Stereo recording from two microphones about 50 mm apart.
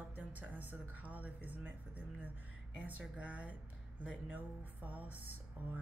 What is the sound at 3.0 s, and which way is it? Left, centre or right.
A woman's voice, right.